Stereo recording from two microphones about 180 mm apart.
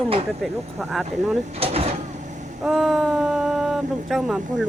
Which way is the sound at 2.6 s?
Centre (ahead or behind).